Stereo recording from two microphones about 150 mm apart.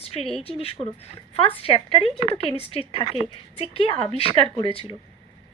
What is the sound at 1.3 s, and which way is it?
A woman's voice, 40° left (ahead or behind).